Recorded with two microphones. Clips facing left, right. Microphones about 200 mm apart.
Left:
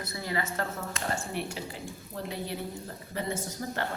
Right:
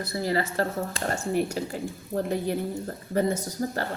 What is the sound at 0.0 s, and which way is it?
Speech, 35° right (ahead or behind).